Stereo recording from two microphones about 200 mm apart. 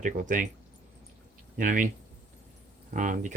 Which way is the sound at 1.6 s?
40° right (ahead or behind).